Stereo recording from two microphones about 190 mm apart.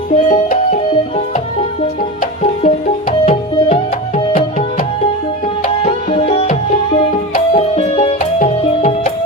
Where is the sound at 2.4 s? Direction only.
35° left (ahead or behind).